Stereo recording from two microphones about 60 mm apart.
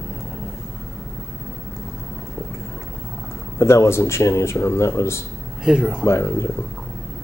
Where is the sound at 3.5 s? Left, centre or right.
Left.